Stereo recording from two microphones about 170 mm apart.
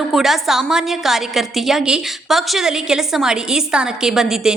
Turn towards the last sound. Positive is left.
turn(degrees=-5)  # may be behind; listen again after turning